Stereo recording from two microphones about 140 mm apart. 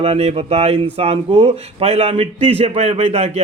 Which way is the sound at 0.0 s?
45° right (ahead or behind).